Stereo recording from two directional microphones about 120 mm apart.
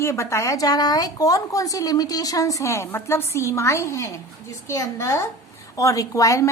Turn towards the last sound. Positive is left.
turn(degrees=25)  # may be behind; listen again after turning